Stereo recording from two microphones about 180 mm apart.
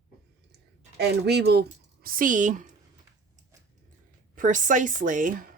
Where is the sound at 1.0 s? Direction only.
65° right (ahead or behind); by 2.7 s 45° right (ahead or behind).